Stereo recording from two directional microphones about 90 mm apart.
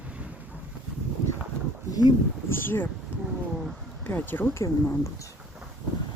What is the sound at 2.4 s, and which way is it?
Speech, 25° left (ahead or behind).